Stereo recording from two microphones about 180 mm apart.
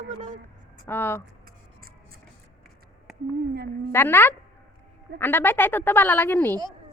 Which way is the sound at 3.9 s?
10° left (ahead or behind).